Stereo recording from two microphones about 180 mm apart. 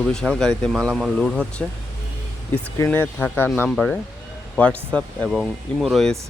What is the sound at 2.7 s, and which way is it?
Speech, 10° left (ahead or behind).